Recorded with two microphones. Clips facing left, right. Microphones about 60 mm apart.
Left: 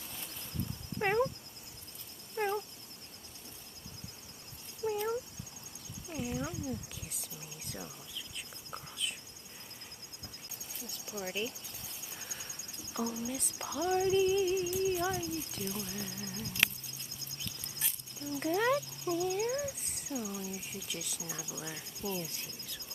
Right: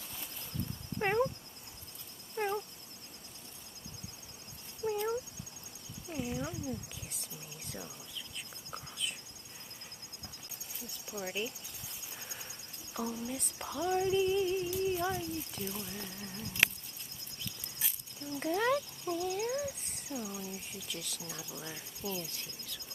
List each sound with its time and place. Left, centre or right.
0.9 s cat: centre
2.3 s cat: centre
4.8 s cat: centre
6.0 s cat: centre
6.7 s speech: centre
11.1 s speech: right
12.1 s speech: centre
18.4 s a sound: centre
19.8 s speech: centre; by 22.8 s left